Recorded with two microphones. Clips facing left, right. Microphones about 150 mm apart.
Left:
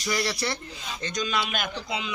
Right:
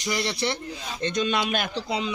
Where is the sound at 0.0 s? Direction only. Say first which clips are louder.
Right 1 dB; 20° right (ahead or behind).